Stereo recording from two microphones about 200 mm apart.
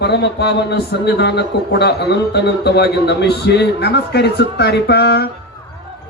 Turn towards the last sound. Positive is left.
turn(degrees=55)  # may be behind; listen again after turning